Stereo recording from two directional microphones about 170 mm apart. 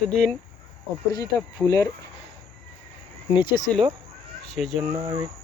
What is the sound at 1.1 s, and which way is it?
Speech, 25° left (ahead or behind).